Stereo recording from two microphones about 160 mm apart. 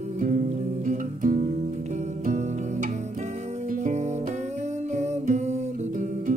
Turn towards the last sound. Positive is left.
turn(degrees=-45)  # may be behind; listen again after turning